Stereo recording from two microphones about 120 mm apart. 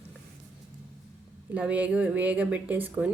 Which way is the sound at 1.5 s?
15° right (ahead or behind).